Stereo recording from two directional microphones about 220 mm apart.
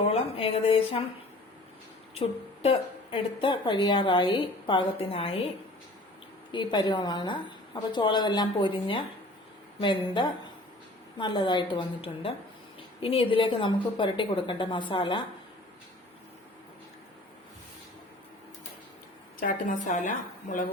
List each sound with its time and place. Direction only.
0.1 s a woman's voice: 25° left (ahead or behind)
2.1 s a woman's voice: 25° left (ahead or behind)
6.5 s a woman's voice: 20° left (ahead or behind)
9.8 s a woman's voice: 20° left (ahead or behind)
19.4 s speech: 40° left (ahead or behind)